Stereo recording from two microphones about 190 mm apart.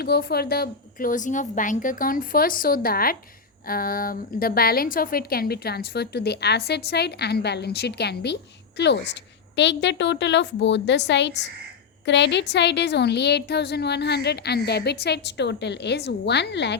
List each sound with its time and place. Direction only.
0.0 s a woman's voice: 55° left (ahead or behind)